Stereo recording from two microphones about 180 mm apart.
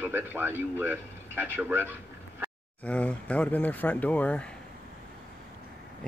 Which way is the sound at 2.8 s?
5° left (ahead or behind).